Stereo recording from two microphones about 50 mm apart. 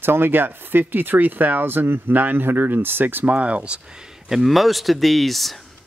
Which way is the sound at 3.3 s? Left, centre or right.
Right.